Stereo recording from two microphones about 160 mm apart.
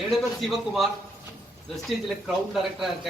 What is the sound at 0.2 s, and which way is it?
Speech, centre (ahead or behind).